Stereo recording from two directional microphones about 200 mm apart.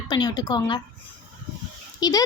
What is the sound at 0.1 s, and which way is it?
Speech, 20° left (ahead or behind).